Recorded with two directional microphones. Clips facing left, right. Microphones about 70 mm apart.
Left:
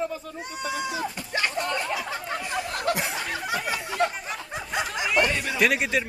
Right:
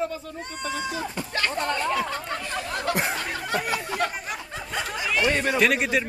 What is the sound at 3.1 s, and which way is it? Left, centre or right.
Snicker, centre.